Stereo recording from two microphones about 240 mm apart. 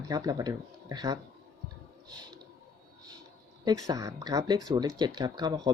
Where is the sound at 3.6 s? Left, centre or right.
Centre.